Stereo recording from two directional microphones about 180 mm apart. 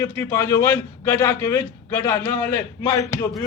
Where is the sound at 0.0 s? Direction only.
15° left (ahead or behind).